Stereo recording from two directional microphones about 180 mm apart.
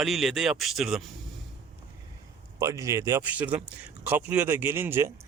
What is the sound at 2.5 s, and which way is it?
Speech, 20° right (ahead or behind).